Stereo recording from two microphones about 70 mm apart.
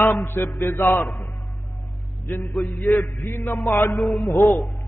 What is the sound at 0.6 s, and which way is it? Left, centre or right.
Music, left.